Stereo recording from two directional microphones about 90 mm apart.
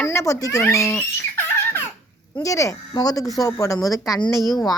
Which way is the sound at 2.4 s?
35° left (ahead or behind).